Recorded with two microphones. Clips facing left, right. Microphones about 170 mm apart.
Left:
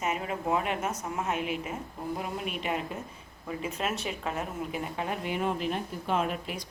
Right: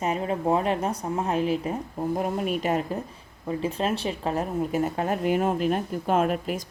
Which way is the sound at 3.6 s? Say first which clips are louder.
Right 6 dB; 30° right (ahead or behind).